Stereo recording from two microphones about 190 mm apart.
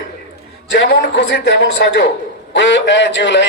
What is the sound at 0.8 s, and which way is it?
A man's voice, 65° left (ahead or behind).